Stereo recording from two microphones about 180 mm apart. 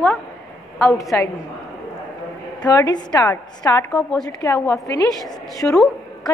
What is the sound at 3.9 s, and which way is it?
Speech, 5° left (ahead or behind).